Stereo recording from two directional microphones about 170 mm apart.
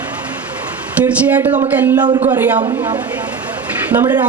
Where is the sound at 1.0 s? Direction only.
10° right (ahead or behind).